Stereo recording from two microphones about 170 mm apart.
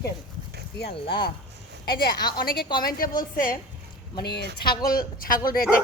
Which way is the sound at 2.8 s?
55° left (ahead or behind).